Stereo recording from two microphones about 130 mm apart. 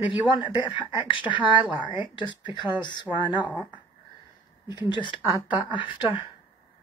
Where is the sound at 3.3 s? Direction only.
10° right (ahead or behind).